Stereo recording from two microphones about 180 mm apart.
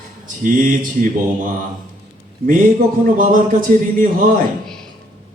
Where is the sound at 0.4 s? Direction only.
45° right (ahead or behind).